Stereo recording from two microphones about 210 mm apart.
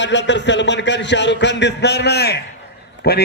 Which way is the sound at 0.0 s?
55° left (ahead or behind).